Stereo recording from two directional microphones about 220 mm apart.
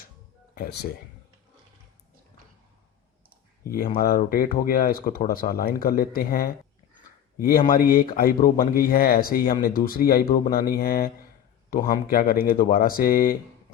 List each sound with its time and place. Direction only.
0.5 s speech: 45° left (ahead or behind)
3.6 s speech: 40° left (ahead or behind)